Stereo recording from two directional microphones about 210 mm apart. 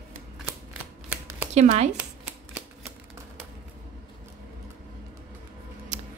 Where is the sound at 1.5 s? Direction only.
30° right (ahead or behind).